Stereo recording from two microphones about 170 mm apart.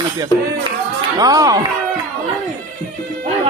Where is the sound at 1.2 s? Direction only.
20° right (ahead or behind).